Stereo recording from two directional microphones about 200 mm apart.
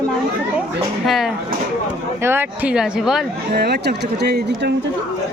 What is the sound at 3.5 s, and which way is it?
Speech, 55° right (ahead or behind).